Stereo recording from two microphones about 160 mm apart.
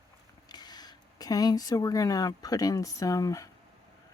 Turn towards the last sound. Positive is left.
turn(degrees=20)  # may be behind; listen again after turning